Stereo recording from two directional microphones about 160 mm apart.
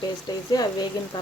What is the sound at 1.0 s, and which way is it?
Speech, 25° left (ahead or behind).